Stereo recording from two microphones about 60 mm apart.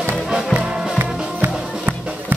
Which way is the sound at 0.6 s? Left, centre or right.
Right.